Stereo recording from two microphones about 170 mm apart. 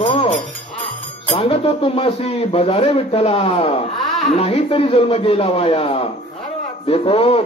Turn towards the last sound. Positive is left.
turn(degrees=35)  # may be behind; listen again after turning